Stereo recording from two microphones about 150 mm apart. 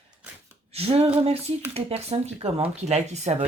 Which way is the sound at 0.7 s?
40° right (ahead or behind).